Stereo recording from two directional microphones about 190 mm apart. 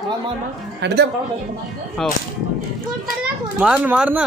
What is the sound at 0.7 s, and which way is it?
Speech, 65° right (ahead or behind).